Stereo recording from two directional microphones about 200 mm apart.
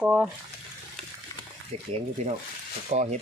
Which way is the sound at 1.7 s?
30° right (ahead or behind).